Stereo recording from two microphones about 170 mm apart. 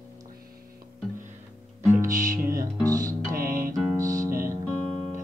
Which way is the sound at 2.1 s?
50° right (ahead or behind).